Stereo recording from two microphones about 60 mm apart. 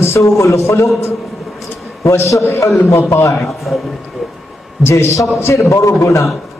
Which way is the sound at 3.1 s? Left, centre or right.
Left.